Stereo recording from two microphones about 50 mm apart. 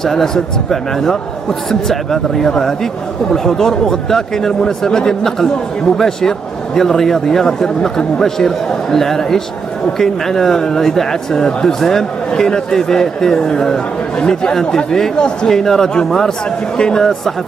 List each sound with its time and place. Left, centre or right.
0.0 s speech: centre